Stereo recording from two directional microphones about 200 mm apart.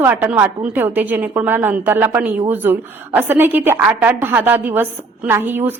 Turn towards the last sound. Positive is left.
turn(degrees=-10)  # may be behind; listen again after turning